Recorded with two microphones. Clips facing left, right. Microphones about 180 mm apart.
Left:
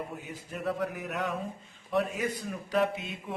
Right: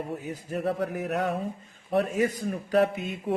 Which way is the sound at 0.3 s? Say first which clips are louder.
Right 5 dB; 40° right (ahead or behind).